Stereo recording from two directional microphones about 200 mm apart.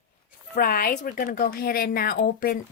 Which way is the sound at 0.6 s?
50° left (ahead or behind).